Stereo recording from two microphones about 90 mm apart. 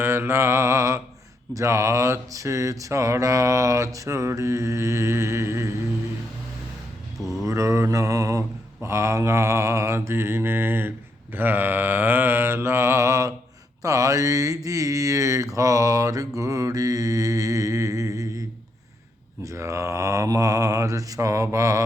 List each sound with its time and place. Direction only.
0.0 s mantra: 25° right (ahead or behind)
7.4 s mantra: 35° right (ahead or behind)